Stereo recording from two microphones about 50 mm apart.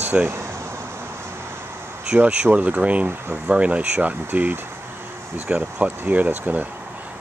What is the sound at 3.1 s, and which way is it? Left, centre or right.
Speech, right.